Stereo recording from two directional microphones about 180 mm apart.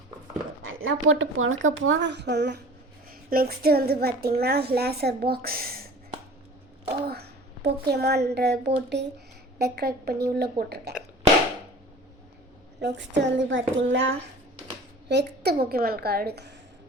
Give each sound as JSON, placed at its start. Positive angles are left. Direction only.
{"t": 0.6, "sound": "a woman's voice", "side_deg": -90}
{"t": 3.1, "sound": "a child's voice", "side_deg": -55}
{"t": 7.1, "sound": "a woman's voice", "side_deg": -60}
{"t": 12.8, "sound": "a sound", "side_deg": -75}
{"t": 13.3, "sound": "a woman's voice", "side_deg": -90}
{"t": 15.1, "sound": "a child's voice", "side_deg": -65}